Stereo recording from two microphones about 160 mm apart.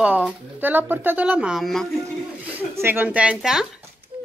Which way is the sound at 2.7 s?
15° right (ahead or behind).